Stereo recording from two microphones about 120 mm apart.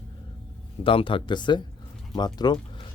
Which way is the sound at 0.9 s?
45° left (ahead or behind).